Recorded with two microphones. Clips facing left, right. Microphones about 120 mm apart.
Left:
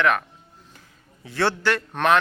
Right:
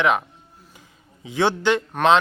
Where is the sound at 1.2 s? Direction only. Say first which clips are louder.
Right 3 dB; 15° right (ahead or behind).